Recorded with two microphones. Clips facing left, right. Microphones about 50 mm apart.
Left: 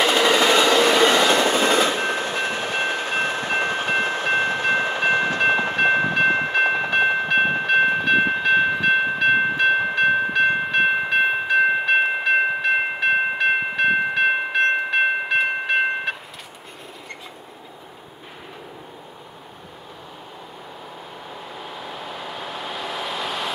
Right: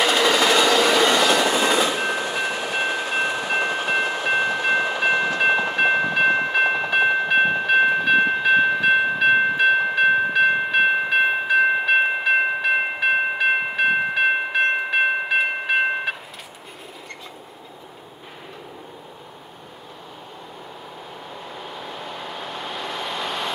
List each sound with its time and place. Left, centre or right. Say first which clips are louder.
0.0 s train: left 1 dB; centre
1.5 s train: left 1 dB; left
5.9 s train: left 2 dB; centre
6.5 s train: even; centre
21.5 s vehicle: even; centre